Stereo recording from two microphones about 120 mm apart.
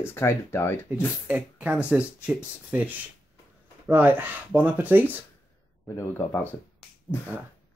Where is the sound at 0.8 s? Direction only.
10° right (ahead or behind).